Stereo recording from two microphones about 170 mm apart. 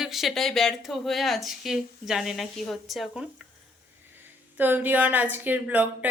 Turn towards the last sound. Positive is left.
turn(degrees=-10)  # may be behind; listen again after turning